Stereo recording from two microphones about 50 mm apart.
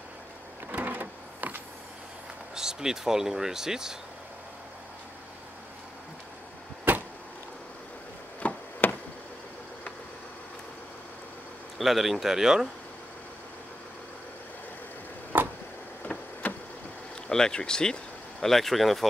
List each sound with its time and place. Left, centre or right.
0.7 s power windows: right
2.5 s speech: centre
6.9 s vehicle: right
8.4 s chop: left
11.8 s speech: centre
15.3 s tick-tock: right
16.4 s vehicle: left
17.3 s speech: centre